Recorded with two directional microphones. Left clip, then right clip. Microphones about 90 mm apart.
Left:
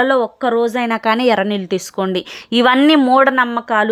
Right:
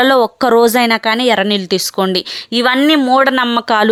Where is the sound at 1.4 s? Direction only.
5° right (ahead or behind).